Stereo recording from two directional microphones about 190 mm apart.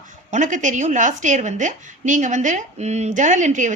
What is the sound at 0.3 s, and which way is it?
A woman's voice, 40° right (ahead or behind).